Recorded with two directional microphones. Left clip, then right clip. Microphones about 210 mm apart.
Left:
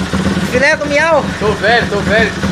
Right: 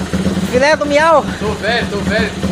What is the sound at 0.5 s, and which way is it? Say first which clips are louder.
Speech: even; 15° right (ahead or behind).